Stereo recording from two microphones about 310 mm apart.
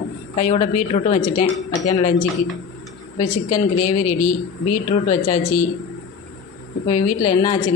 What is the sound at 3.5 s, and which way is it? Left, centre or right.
Speech, left.